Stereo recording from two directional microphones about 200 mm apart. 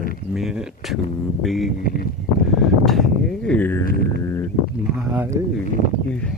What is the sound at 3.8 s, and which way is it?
Music, 45° left (ahead or behind).